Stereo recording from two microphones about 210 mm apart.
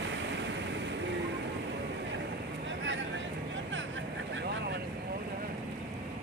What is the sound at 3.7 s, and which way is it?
Vehicle, 60° right (ahead or behind).